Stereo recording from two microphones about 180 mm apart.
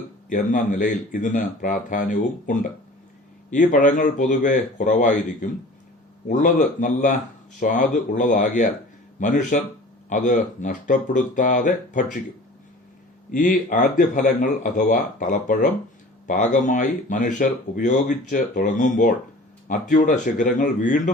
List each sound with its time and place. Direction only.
0.3 s speech: 45° left (ahead or behind)
13.3 s speech: 45° left (ahead or behind)